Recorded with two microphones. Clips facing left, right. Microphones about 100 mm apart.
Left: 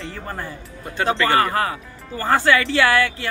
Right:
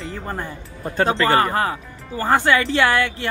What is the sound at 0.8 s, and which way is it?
Speech, 35° right (ahead or behind).